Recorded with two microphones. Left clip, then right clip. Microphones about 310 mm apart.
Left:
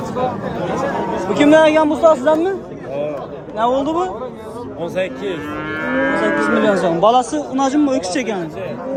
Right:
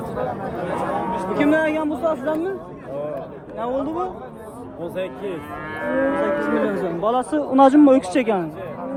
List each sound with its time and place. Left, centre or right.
1.3 s a man's voice: centre
3.6 s a man's voice: centre
5.8 s livestock: centre
6.4 s a man's voice: centre
7.1 s a man's voice: centre